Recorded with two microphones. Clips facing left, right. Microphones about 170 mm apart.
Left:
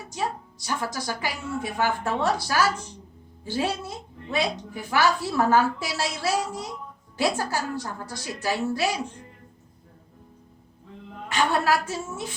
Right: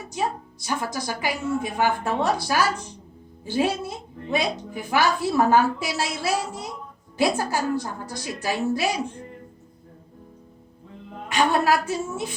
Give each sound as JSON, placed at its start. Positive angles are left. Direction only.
{"t": 0.6, "sound": "a woman's voice", "side_deg": -15}
{"t": 11.3, "sound": "a woman's voice", "side_deg": -15}